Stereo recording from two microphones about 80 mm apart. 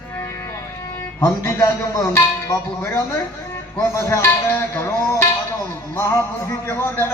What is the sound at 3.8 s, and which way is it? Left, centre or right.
Speech, left.